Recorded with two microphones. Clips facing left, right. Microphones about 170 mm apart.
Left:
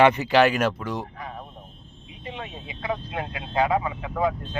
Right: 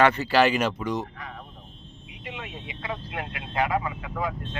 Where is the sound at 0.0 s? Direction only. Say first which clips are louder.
Left 2 dB; 15° left (ahead or behind).